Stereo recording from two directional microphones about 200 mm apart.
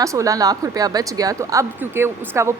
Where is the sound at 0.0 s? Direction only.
15° right (ahead or behind).